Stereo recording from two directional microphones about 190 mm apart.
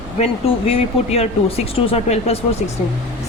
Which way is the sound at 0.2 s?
30° left (ahead or behind).